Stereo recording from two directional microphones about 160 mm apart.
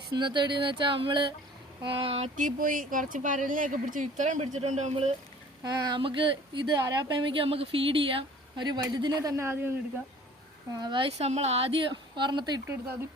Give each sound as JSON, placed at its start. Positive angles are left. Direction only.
{"t": 0.1, "sound": "a woman's voice", "side_deg": -30}
{"t": 5.6, "sound": "a woman's voice", "side_deg": -25}
{"t": 10.8, "sound": "a woman's voice", "side_deg": -30}